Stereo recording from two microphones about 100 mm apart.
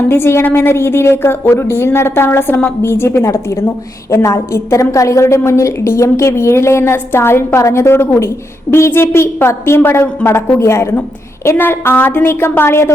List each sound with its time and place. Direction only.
0.1 s a woman's voice: 25° left (ahead or behind)